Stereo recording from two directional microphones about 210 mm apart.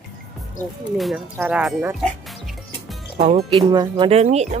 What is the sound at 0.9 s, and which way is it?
Speech, centre (ahead or behind).